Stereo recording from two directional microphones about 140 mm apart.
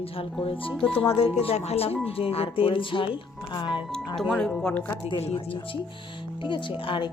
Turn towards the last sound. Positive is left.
turn(degrees=35)  # may be behind; listen again after turning